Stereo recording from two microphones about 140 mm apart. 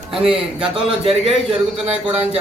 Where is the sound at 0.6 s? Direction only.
5° right (ahead or behind).